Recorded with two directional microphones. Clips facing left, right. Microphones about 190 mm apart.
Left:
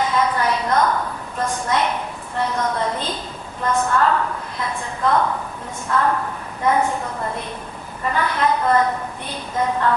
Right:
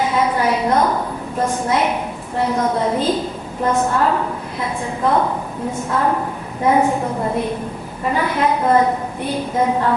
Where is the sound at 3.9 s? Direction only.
15° right (ahead or behind).